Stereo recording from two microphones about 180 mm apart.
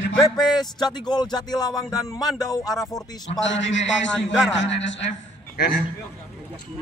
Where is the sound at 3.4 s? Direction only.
90° left.